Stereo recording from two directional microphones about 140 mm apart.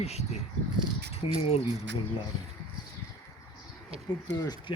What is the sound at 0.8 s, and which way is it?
Speech, 45° right (ahead or behind).